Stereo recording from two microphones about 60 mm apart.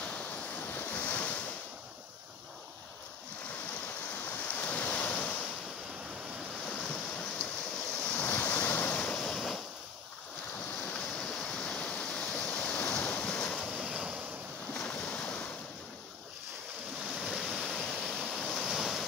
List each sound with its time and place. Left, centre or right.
0.0 s waves: left
4.3 s waves: left
6.6 s waves: centre; by 9.0 s left
9.0 s waves: centre
11.0 s waves: centre
13.7 s waves: centre
14.7 s boat: centre
15.0 s waves: centre
17.1 s waves: centre